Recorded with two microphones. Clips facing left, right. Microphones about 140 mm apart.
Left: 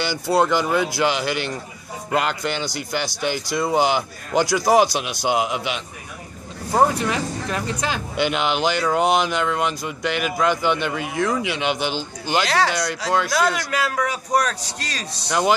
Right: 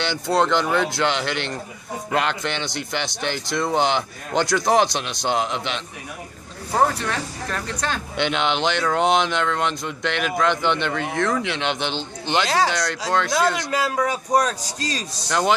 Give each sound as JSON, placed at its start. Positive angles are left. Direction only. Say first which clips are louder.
{"t": 0.0, "sound": "speech", "louder": "left 1 dB", "side_deg": 5}
{"t": 13.6, "sound": "a man's voice", "louder": "right 1 dB", "side_deg": -20}
{"t": 15.2, "sound": "speech", "louder": "left 1 dB", "side_deg": 5}